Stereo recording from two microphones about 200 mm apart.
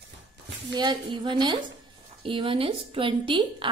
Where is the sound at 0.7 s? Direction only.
20° right (ahead or behind).